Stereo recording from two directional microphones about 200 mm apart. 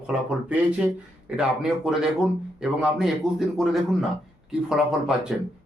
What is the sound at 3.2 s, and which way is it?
Speech, 5° right (ahead or behind).